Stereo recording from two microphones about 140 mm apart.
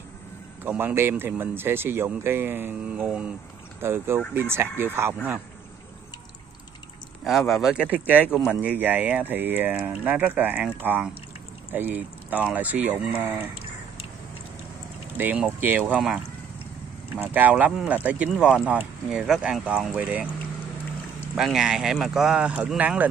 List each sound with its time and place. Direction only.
0.7 s speech: 15° right (ahead or behind)
7.2 s speech: centre (ahead or behind)
15.1 s speech: 10° right (ahead or behind)
21.4 s speech: centre (ahead or behind)